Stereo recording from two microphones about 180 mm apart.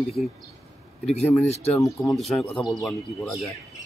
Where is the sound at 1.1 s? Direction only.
35° left (ahead or behind).